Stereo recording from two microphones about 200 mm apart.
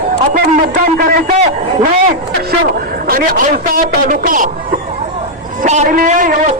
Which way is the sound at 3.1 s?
45° right (ahead or behind).